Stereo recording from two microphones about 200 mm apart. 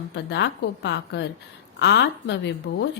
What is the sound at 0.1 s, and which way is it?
A woman's voice, 60° left (ahead or behind).